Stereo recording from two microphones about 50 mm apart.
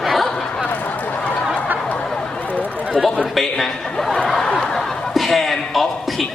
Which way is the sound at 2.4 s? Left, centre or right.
Left.